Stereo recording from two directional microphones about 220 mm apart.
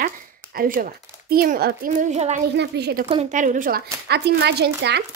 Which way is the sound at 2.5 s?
50° right (ahead or behind).